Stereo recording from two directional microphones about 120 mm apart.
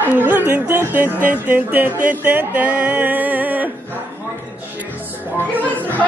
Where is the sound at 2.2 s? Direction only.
15° right (ahead or behind).